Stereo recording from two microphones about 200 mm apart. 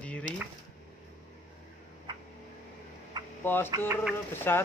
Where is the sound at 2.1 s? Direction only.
20° right (ahead or behind).